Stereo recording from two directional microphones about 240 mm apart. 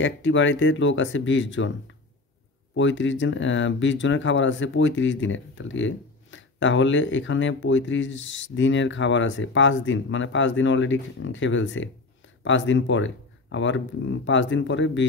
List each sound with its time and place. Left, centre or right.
0.0 s speech: left
2.7 s speech: left